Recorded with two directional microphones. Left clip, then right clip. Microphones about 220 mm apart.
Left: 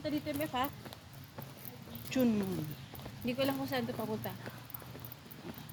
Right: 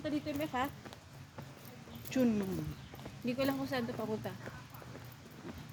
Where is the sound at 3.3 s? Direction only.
20° right (ahead or behind).